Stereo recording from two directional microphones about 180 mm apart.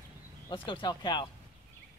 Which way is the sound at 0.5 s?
25° left (ahead or behind).